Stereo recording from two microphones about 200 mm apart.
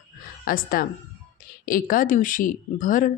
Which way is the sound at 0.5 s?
45° left (ahead or behind).